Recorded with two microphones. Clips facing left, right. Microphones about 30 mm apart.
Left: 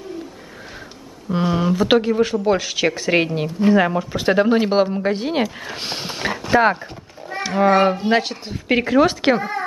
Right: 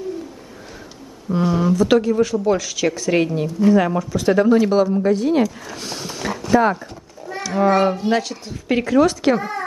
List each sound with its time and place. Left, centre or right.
1.3 s speech: left
9.4 s speech: centre